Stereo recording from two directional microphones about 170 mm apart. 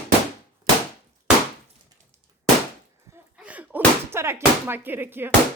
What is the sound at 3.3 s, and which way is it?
Speech, 10° right (ahead or behind).